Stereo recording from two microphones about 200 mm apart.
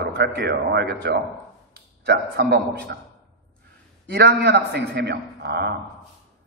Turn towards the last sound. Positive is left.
turn(degrees=-55)  # may be behind; listen again after turning